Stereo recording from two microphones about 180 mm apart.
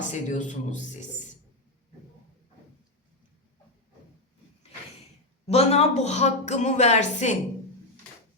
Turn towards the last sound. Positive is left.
turn(degrees=40)  # may be behind; listen again after turning